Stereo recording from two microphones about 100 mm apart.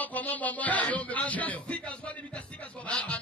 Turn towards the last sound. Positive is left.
turn(degrees=10)  # may be behind; listen again after turning